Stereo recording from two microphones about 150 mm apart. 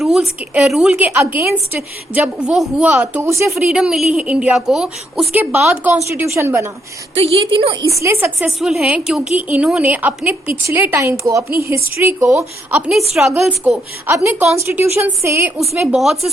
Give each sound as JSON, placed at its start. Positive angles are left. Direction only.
{"t": 0.0, "sound": "a woman's voice", "side_deg": 0}
{"t": 3.6, "sound": "a woman's voice", "side_deg": -5}
{"t": 7.2, "sound": "a woman's voice", "side_deg": -40}
{"t": 7.7, "sound": "a woman's voice", "side_deg": -25}
{"t": 8.4, "sound": "a woman's voice", "side_deg": 0}
{"t": 11.4, "sound": "a woman's voice", "side_deg": -90}
{"t": 11.7, "sound": "a woman's voice", "side_deg": -20}
{"t": 12.8, "sound": "a woman's voice", "side_deg": 0}
{"t": 14.5, "sound": "a woman's voice", "side_deg": -15}
{"t": 15.9, "sound": "a woman's voice", "side_deg": 0}